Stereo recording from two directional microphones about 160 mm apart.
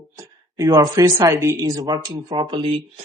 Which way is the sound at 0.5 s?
20° right (ahead or behind).